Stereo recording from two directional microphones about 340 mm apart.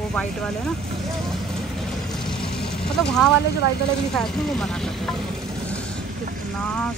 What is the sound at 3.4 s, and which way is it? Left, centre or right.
Speech, left.